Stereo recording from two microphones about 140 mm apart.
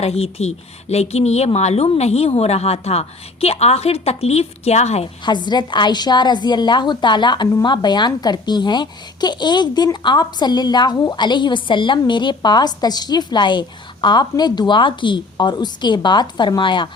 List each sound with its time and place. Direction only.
0.0 s a woman's voice: 45° left (ahead or behind)
5.2 s a woman's voice: 30° left (ahead or behind)